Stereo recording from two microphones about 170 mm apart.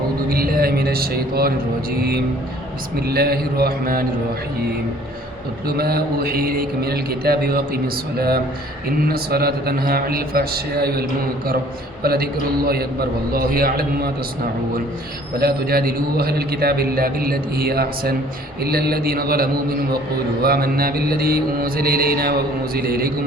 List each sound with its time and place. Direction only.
0.3 s a man's voice: 60° right (ahead or behind)
5.6 s a man's voice: 65° right (ahead or behind)
9.0 s a man's voice: 65° right (ahead or behind)
12.0 s a man's voice: 65° right (ahead or behind)
15.4 s a man's voice: 65° right (ahead or behind)